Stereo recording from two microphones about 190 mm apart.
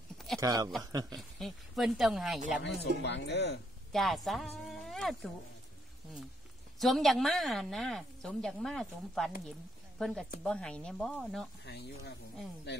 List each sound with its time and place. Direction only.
0.4 s speech: 20° right (ahead or behind)
1.1 s a woman's voice: centre (ahead or behind)
2.6 s speech: 65° left (ahead or behind)
3.9 s a woman's voice: centre (ahead or behind)
6.8 s a woman's voice: centre (ahead or behind)
11.6 s speech: 60° left (ahead or behind)